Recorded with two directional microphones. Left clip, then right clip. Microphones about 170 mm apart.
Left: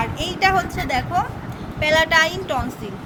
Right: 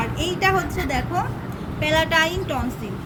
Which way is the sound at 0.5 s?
50° left (ahead or behind).